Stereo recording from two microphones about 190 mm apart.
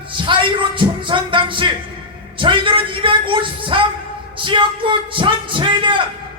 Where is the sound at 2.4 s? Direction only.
25° right (ahead or behind).